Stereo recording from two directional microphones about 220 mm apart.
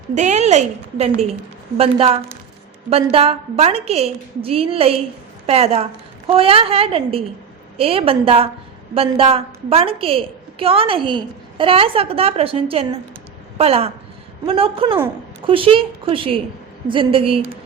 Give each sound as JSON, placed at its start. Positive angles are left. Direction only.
{"t": 0.1, "sound": "a woman's voice", "side_deg": -35}